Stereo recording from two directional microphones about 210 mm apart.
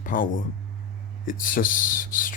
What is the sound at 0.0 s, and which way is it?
Speech, 40° left (ahead or behind).